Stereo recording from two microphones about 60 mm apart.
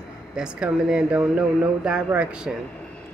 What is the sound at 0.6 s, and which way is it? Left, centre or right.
Speech, centre.